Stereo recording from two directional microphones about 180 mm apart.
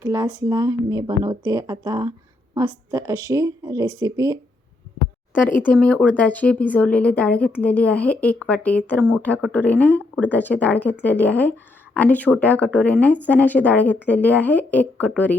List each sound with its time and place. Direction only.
0.0 s speech: 20° right (ahead or behind)
5.6 s speech: 5° left (ahead or behind)